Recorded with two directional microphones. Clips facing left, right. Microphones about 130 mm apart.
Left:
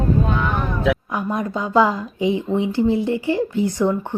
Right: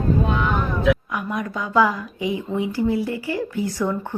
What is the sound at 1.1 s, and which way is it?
Speech, 30° left (ahead or behind).